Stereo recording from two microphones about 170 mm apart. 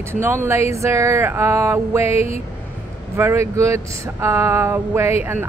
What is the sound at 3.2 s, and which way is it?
Speech, 15° right (ahead or behind).